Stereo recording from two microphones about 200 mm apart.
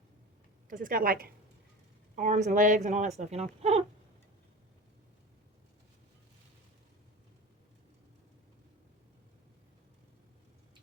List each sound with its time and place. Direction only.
0.7 s a woman's voice: 45° right (ahead or behind)